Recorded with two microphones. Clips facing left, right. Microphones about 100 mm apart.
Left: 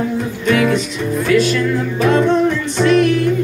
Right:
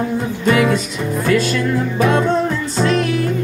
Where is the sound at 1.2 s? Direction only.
40° right (ahead or behind).